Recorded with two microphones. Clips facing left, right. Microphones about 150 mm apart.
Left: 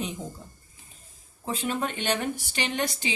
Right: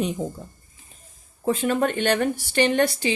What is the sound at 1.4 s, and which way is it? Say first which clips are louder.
Speech: right 8 dB; 50° right (ahead or behind).